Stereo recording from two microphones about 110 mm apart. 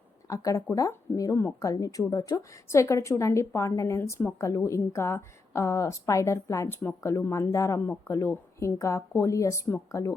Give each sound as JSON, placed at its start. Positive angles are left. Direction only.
{"t": 0.3, "sound": "a woman's voice", "side_deg": 30}